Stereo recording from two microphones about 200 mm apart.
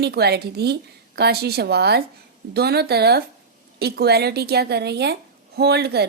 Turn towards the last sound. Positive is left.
turn(degrees=-55)  # may be behind; listen again after turning